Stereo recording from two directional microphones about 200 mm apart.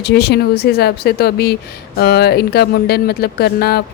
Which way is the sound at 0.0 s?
50° left (ahead or behind).